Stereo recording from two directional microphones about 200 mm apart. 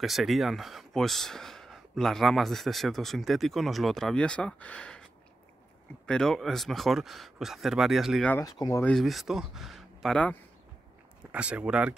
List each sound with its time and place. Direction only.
0.0 s speech: centre (ahead or behind)
8.4 s speech: 15° left (ahead or behind)
8.9 s speech: centre (ahead or behind)
11.3 s speech: 5° right (ahead or behind)